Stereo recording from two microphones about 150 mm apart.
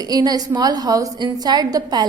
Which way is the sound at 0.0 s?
25° right (ahead or behind).